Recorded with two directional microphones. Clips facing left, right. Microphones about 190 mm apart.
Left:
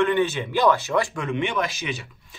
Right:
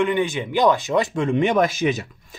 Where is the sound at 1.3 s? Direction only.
40° right (ahead or behind).